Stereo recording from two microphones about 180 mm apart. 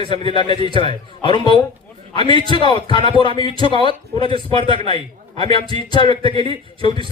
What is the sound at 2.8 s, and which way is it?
Speech, 25° left (ahead or behind).